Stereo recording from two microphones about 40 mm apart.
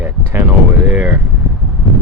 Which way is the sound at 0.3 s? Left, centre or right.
Right.